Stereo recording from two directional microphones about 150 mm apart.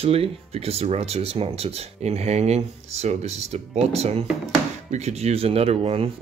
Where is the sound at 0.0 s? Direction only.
40° right (ahead or behind).